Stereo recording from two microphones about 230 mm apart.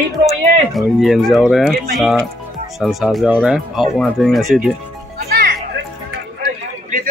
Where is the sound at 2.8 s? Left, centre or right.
Centre.